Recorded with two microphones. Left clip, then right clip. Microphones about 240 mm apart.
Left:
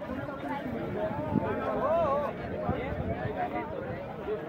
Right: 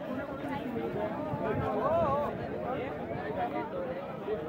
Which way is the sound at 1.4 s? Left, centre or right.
Left.